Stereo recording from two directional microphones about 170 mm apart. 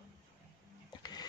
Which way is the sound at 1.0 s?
25° left (ahead or behind).